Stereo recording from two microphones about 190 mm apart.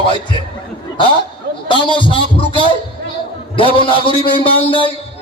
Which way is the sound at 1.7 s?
25° left (ahead or behind).